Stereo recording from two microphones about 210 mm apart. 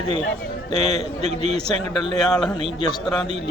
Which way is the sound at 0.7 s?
30° right (ahead or behind).